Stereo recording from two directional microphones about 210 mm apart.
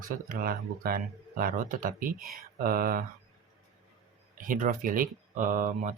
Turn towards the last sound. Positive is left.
turn(degrees=-40)  # may be behind; listen again after turning